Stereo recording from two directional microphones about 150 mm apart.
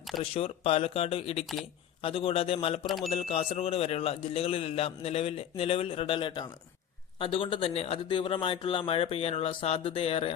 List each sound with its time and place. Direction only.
0.2 s a man's voice: 40° left (ahead or behind)
2.8 s speech: centre (ahead or behind)
3.1 s a man's voice: 40° left (ahead or behind)